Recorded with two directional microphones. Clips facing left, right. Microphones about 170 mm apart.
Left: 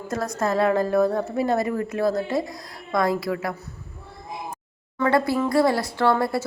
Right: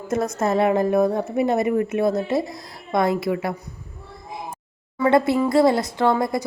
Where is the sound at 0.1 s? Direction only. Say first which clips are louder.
Right 3 dB; 20° right (ahead or behind).